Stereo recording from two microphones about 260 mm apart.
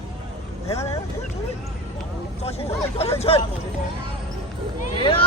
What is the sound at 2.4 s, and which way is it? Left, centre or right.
Speech, left.